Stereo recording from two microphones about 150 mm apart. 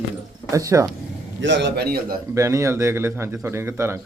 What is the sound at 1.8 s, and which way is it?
Speech, 90° right.